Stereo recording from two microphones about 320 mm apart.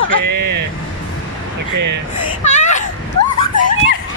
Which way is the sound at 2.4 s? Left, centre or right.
Left.